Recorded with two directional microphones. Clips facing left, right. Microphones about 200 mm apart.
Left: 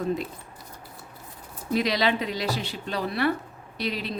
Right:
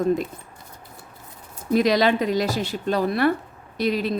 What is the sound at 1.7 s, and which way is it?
Speech, 45° right (ahead or behind).